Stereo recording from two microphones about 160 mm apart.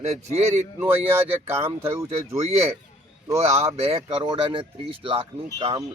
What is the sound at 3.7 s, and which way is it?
Speech, 40° right (ahead or behind).